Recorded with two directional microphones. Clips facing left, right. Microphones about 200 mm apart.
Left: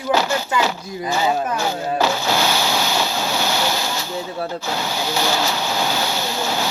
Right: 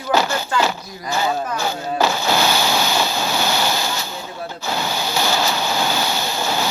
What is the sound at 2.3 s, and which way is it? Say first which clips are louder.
Ocean: right 1 dB; 50° right (ahead or behind).